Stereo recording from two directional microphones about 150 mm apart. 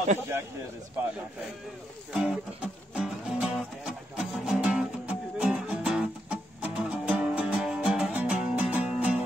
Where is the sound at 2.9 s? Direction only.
5° right (ahead or behind).